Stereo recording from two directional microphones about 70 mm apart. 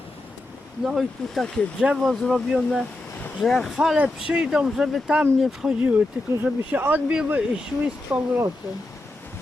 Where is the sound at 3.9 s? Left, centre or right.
Centre.